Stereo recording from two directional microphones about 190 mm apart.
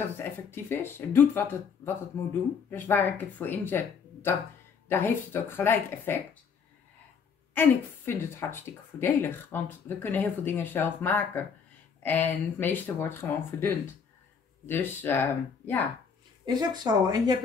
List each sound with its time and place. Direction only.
0.2 s speech: 10° left (ahead or behind)
2.7 s speech: 10° left (ahead or behind)
7.5 s speech: 10° left (ahead or behind)
16.4 s speech: 20° right (ahead or behind)